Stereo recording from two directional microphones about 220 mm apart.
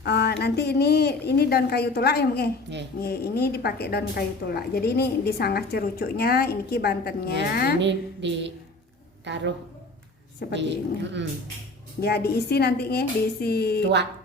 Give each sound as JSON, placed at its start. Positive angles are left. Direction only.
{"t": 0.0, "sound": "a woman's voice", "side_deg": 50}
{"t": 2.7, "sound": "speech", "side_deg": -55}
{"t": 3.0, "sound": "a woman's voice", "side_deg": 45}
{"t": 7.8, "sound": "a woman's voice", "side_deg": -55}
{"t": 10.6, "sound": "a woman's voice", "side_deg": -55}
{"t": 12.0, "sound": "a woman's voice", "side_deg": 45}